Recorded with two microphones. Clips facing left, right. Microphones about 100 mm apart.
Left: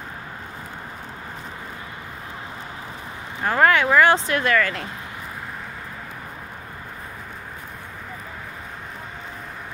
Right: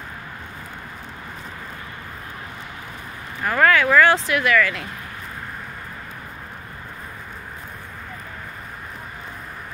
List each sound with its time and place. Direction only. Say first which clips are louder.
3.4 s speech: even; 25° left (ahead or behind)
4.3 s speech: right 1 dB; 35° left (ahead or behind)